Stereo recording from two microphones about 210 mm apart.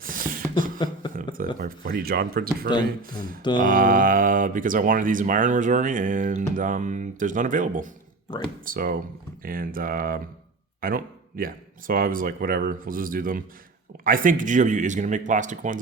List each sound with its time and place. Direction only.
0.0 s a sound: 40° right (ahead or behind)
1.1 s speech: 40° right (ahead or behind)
3.6 s speech: 40° right (ahead or behind)